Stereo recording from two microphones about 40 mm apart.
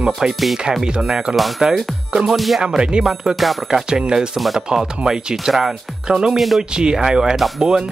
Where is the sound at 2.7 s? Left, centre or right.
Right.